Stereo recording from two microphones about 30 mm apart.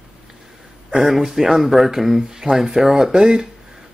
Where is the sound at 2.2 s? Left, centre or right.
Centre.